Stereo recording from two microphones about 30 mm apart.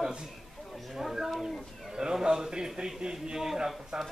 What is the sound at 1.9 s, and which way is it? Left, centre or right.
A man's voice, right.